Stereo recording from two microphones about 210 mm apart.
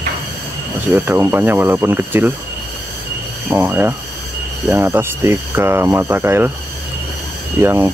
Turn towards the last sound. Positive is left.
turn(degrees=-10)  # may be behind; listen again after turning